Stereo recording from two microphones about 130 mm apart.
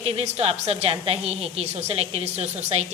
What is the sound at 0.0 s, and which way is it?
A woman's voice, 50° right (ahead or behind).